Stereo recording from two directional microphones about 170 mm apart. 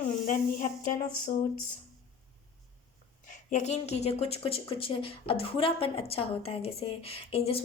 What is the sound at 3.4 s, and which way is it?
Speech, 40° left (ahead or behind).